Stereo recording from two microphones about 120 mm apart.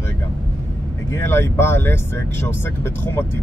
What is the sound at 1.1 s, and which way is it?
Speech, 20° left (ahead or behind).